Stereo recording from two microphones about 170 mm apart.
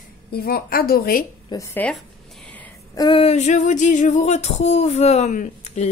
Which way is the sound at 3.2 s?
40° left (ahead or behind).